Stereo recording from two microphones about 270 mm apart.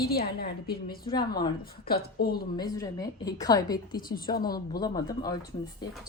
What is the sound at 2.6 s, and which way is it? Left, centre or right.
A woman's voice, centre.